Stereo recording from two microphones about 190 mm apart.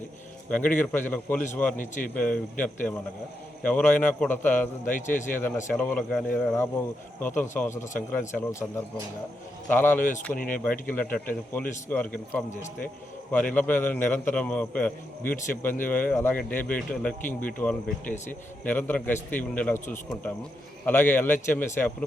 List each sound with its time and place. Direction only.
0.5 s speech: 10° left (ahead or behind)
10.3 s speech: 45° left (ahead or behind)
10.6 s speech: 10° left (ahead or behind)